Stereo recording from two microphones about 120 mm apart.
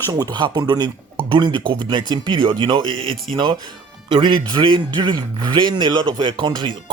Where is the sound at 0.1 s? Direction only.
35° right (ahead or behind).